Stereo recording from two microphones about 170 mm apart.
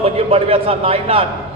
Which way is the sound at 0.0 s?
35° right (ahead or behind).